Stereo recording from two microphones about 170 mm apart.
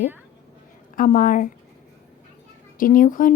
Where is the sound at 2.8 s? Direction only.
55° left (ahead or behind).